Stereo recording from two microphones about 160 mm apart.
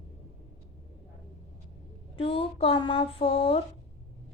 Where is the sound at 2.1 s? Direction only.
35° left (ahead or behind).